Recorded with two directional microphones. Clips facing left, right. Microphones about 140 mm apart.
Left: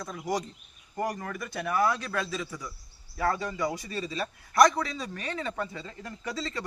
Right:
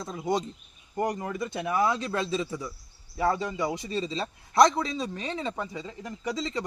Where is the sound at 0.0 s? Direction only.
25° right (ahead or behind).